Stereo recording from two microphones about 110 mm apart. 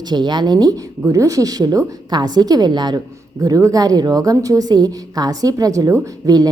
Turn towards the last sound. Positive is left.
turn(degrees=-35)  # may be behind; listen again after turning